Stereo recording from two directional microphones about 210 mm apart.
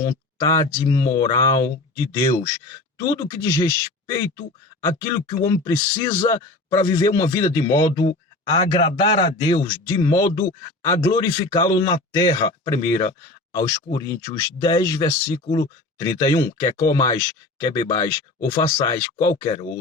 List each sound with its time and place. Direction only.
0.0 s speech: 15° left (ahead or behind)
3.0 s speech: 20° left (ahead or behind)